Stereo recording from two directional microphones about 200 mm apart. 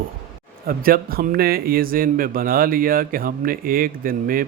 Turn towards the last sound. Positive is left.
turn(degrees=-45)  # may be behind; listen again after turning